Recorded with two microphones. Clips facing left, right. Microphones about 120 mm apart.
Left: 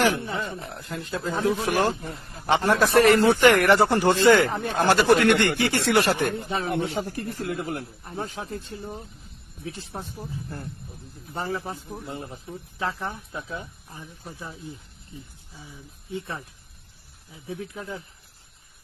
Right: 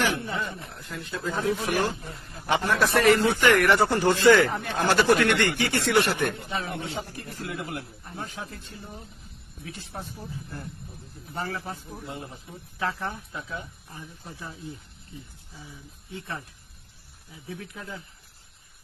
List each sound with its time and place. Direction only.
0.3 s speech: 30° left (ahead or behind)
6.7 s speech: 60° left (ahead or behind); by 8.1 s 40° left (ahead or behind)
8.1 s speech: 30° left (ahead or behind)
11.3 s speech: 25° left (ahead or behind)
12.8 s speech: 20° left (ahead or behind)